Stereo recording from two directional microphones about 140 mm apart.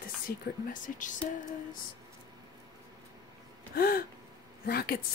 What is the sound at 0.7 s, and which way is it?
Speech, 65° left (ahead or behind).